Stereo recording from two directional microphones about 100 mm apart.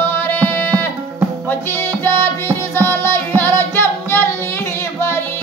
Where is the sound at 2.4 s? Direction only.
25° left (ahead or behind).